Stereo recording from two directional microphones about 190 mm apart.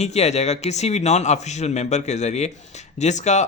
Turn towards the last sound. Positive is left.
turn(degrees=35)  # may be behind; listen again after turning